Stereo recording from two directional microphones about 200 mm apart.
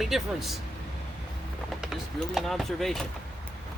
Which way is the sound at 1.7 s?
Centre (ahead or behind).